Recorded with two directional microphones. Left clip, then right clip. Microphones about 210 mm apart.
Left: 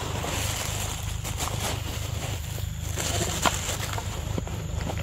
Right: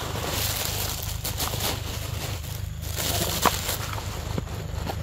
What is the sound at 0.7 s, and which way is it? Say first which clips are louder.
Vehicle: right 2 dB; 45° right (ahead or behind).